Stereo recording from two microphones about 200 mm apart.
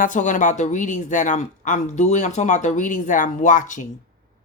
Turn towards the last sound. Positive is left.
turn(degrees=40)  # may be behind; listen again after turning